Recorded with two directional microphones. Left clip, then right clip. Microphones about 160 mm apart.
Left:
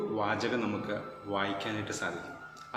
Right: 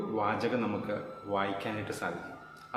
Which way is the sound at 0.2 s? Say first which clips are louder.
Right 2 dB; 20° right (ahead or behind).